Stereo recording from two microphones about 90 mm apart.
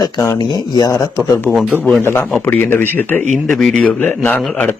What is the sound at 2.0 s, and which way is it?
Speech, 25° left (ahead or behind).